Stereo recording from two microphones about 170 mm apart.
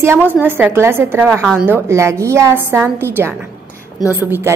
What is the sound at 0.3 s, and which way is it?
A woman's voice, 10° right (ahead or behind).